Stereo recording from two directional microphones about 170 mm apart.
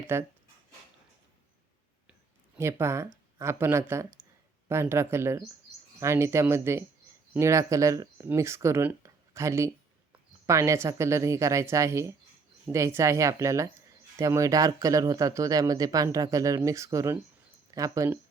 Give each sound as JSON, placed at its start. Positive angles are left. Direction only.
{"t": 0.1, "sound": "speech", "side_deg": -15}
{"t": 2.6, "sound": "speech", "side_deg": -15}